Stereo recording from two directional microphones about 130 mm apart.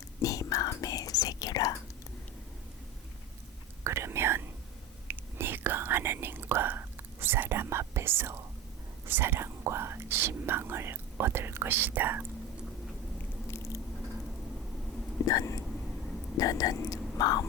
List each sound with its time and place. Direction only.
0.2 s whispering: 25° left (ahead or behind)
3.8 s whispering: 20° right (ahead or behind)
13.5 s squish: 25° left (ahead or behind)
15.3 s vehicle: 30° left (ahead or behind)
16.4 s whispering: 30° left (ahead or behind)